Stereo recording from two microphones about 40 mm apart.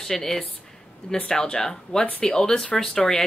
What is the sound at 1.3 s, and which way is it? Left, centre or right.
Speech, left.